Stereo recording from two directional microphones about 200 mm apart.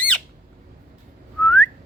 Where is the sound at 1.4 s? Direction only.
5° left (ahead or behind).